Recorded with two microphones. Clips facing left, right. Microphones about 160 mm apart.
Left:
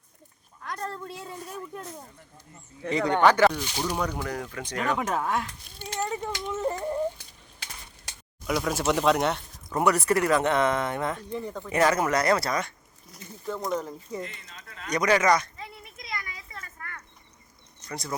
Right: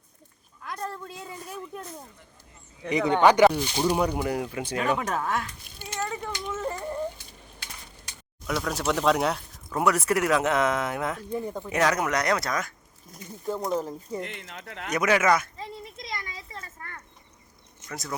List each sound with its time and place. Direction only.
0.6 s a sound: 5° right (ahead or behind)
2.9 s speech: 15° right (ahead or behind)
4.9 s speech: 10° left (ahead or behind)
6.1 s a sound: 20° left (ahead or behind)
8.4 s speech: centre (ahead or behind)
11.7 s speech: centre (ahead or behind)
13.5 s speech: 30° right (ahead or behind)
14.2 s speech: 70° right (ahead or behind)
14.9 s speech: 5° right (ahead or behind)
15.5 s a sound: 35° right (ahead or behind)
17.8 s speech: centre (ahead or behind)